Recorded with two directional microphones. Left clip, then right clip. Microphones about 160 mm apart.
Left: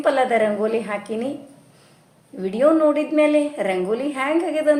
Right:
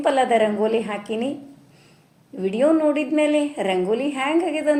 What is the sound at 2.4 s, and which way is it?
A woman's voice, 15° right (ahead or behind).